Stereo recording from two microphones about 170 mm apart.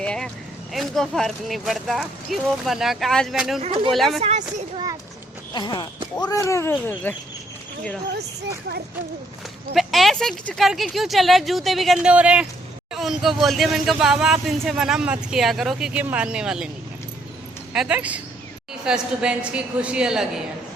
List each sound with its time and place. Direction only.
0.0 s vehicle: 5° left (ahead or behind)
0.7 s speech: centre (ahead or behind)
4.2 s a child's voice: 40° right (ahead or behind)
5.5 s speech: 25° left (ahead or behind)
9.7 s speech: centre (ahead or behind)
17.7 s speech: 5° right (ahead or behind)